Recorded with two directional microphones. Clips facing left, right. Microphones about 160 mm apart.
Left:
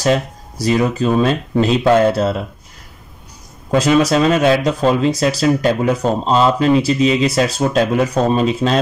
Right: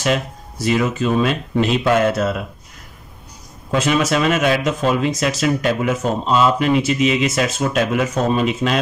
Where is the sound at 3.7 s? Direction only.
35° left (ahead or behind).